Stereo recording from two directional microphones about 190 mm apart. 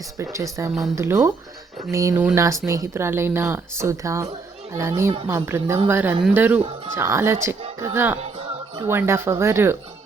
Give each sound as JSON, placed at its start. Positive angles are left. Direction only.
{"t": 0.2, "sound": "speech", "side_deg": -15}